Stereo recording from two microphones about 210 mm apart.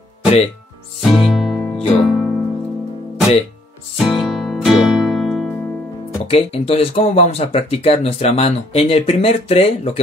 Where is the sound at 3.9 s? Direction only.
Centre (ahead or behind).